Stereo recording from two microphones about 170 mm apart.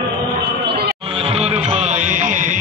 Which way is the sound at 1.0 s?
35° right (ahead or behind).